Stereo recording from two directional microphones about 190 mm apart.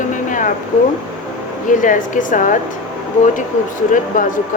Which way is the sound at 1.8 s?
45° left (ahead or behind).